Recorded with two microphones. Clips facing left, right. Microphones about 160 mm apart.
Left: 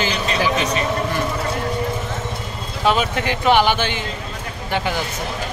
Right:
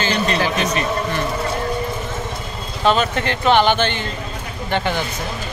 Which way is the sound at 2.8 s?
10° left (ahead or behind).